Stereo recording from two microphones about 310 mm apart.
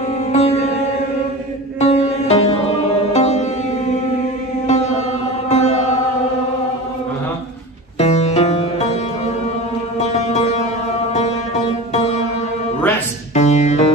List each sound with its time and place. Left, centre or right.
0.3 s music: centre
1.8 s music: centre
4.6 s mantra: left
8.0 s music: left
13.3 s music: left